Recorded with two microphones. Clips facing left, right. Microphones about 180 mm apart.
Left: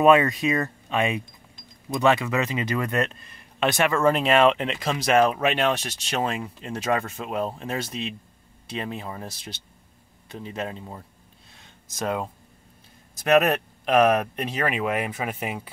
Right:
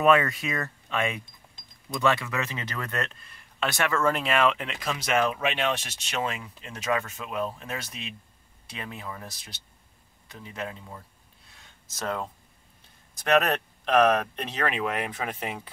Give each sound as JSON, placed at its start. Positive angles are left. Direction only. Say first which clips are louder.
{"t": 0.0, "sound": "speech", "louder": "left 4 dB", "side_deg": 20}
{"t": 12.0, "sound": "speech", "louder": "left 4 dB", "side_deg": 15}